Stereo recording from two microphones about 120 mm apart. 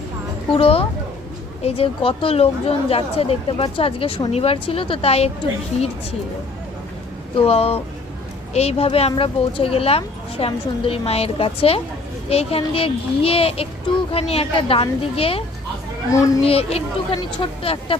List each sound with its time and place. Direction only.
0.5 s speech: 50° left (ahead or behind)
7.3 s speech: 55° left (ahead or behind)
16.1 s speech: 30° left (ahead or behind)
16.4 s speech: 55° left (ahead or behind)